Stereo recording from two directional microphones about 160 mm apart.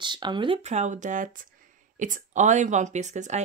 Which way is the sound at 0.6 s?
45° right (ahead or behind).